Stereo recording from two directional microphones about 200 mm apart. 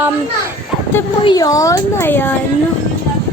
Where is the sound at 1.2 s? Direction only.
20° left (ahead or behind).